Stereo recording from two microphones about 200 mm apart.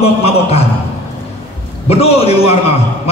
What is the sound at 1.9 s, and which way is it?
Speech, 30° left (ahead or behind).